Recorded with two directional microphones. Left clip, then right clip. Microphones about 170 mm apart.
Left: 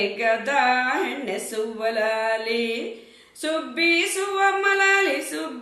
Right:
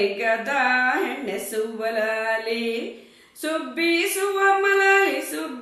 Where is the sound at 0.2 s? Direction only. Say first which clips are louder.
Left 1 dB; 20° left (ahead or behind).